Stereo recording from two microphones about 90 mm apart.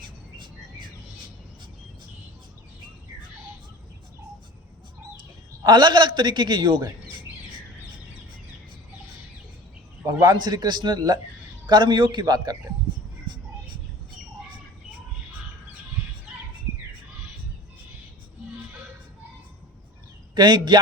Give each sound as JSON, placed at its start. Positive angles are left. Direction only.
{"t": 0.0, "sound": "bird", "side_deg": -60}
{"t": 5.6, "sound": "a man's voice", "side_deg": -55}
{"t": 10.3, "sound": "a man's voice", "side_deg": -50}
{"t": 12.2, "sound": "speech", "side_deg": -45}
{"t": 20.3, "sound": "speech", "side_deg": -55}